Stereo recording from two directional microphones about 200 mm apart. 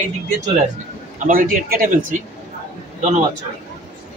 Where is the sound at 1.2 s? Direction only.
45° right (ahead or behind).